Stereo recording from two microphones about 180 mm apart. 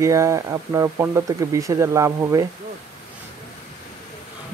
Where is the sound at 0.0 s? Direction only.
15° right (ahead or behind).